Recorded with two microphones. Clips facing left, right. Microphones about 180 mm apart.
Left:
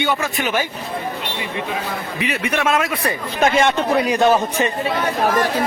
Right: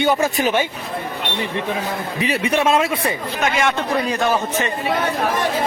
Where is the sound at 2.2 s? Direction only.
35° right (ahead or behind).